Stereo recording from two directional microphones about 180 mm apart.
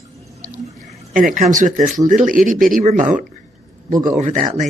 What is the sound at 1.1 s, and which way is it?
Speech, 45° right (ahead or behind).